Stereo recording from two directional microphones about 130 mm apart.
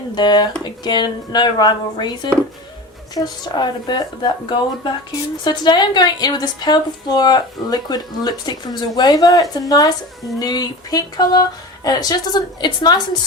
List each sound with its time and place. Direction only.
0.2 s a woman's voice: 35° left (ahead or behind)